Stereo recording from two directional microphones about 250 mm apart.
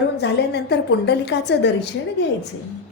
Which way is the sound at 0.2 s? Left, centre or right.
Left.